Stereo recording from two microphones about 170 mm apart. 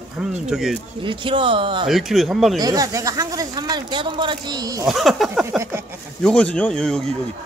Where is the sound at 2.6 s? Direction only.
20° right (ahead or behind).